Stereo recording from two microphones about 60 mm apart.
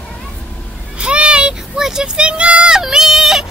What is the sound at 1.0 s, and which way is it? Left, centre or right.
Speech, centre.